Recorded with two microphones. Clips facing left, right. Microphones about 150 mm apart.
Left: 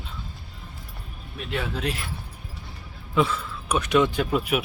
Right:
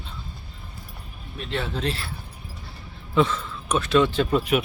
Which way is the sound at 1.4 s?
10° left (ahead or behind).